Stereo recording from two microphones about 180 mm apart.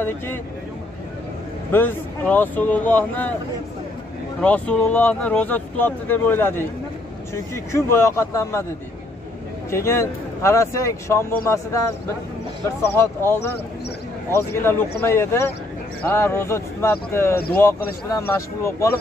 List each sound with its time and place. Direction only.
1.7 s speech: 10° left (ahead or behind)
4.4 s speech: 10° left (ahead or behind)
9.8 s speech: 15° left (ahead or behind)